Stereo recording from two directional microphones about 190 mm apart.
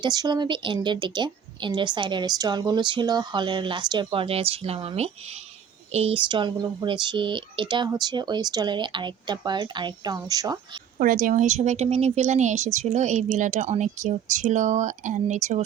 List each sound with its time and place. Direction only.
0.0 s a woman's voice: 20° right (ahead or behind)
10.9 s a woman's voice: 45° right (ahead or behind)